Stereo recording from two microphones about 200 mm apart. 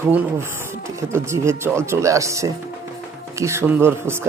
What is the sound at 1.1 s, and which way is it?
Speech, 15° right (ahead or behind).